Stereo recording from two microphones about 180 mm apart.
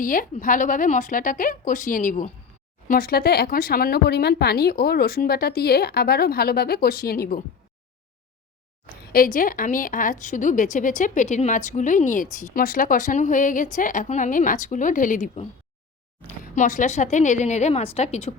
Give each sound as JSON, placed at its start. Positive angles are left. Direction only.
{"t": 0.0, "sound": "a woman's voice", "side_deg": 50}
{"t": 9.1, "sound": "a woman's voice", "side_deg": 50}